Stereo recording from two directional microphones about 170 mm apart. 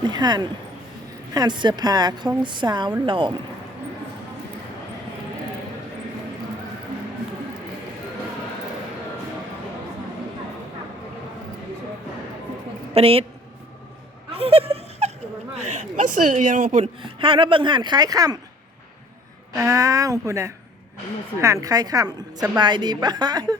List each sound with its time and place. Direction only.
0.0 s a woman's voice: 25° right (ahead or behind)
12.9 s a woman's voice: 35° right (ahead or behind)
14.3 s laughter: 35° right (ahead or behind)
15.5 s a woman's voice: 45° right (ahead or behind)
17.0 s a woman's voice: 30° right (ahead or behind)
19.5 s a woman's voice: 15° right (ahead or behind)